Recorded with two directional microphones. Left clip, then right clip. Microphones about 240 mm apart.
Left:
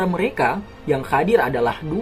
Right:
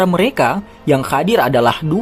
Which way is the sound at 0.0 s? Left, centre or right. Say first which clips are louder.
Right 6 dB; right.